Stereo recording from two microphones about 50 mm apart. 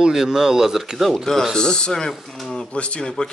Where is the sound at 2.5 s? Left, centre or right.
Left.